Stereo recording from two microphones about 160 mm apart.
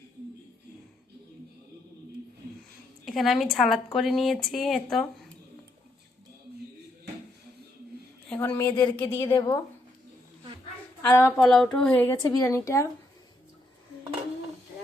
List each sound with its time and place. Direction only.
3.1 s speech: centre (ahead or behind)
8.3 s a woman's voice: 15° left (ahead or behind)
8.7 s speech: 30° left (ahead or behind)
9.1 s speech: 15° left (ahead or behind)
11.0 s speech: 15° left (ahead or behind)
11.3 s speech: centre (ahead or behind)
12.0 s speech: 20° left (ahead or behind)